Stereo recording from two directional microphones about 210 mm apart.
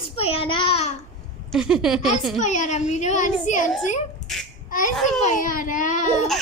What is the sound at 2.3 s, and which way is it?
A child's voice, 35° left (ahead or behind).